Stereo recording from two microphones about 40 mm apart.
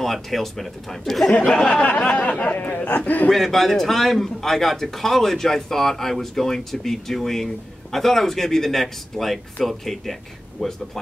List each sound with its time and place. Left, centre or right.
0.0 s speech: centre
1.5 s a man's voice: centre
1.8 s a sound: left
3.3 s a man's voice: centre